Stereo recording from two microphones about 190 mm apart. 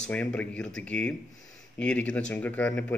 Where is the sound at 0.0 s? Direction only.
5° left (ahead or behind).